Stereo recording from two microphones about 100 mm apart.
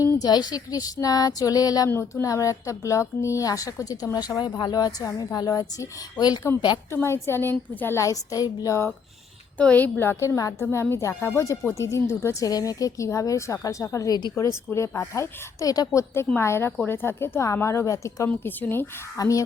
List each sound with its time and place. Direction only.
0.0 s a woman's voice: 35° left (ahead or behind)
1.9 s a woman's voice: 20° left (ahead or behind)
2.2 s a woman's voice: 35° left (ahead or behind)
6.9 s a woman's voice: 25° left (ahead or behind)
9.6 s a woman's voice: 15° left (ahead or behind); by 18.3 s 30° left (ahead or behind)
18.3 s a woman's voice: 20° left (ahead or behind)
19.1 s a woman's voice: 35° left (ahead or behind)